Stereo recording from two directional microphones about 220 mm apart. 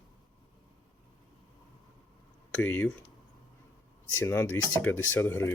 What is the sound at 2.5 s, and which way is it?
Speech, 10° left (ahead or behind).